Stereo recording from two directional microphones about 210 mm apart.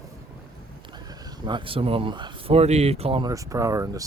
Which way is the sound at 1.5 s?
25° right (ahead or behind).